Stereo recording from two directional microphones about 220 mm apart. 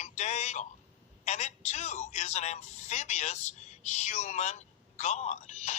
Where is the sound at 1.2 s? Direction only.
30° left (ahead or behind).